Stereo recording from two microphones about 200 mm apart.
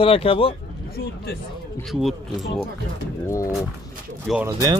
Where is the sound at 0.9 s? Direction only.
50° left (ahead or behind).